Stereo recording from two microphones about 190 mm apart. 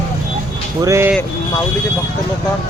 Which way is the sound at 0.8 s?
15° right (ahead or behind).